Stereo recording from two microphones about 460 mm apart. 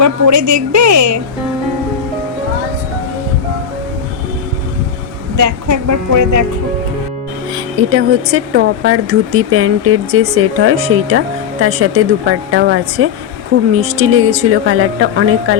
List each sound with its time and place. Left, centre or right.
0.0 s a woman's voice: right
5.4 s a woman's voice: right
7.8 s speech: right